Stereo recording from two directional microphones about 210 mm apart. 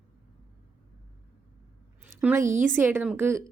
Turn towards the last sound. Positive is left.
turn(degrees=-10)  # may be behind; listen again after turning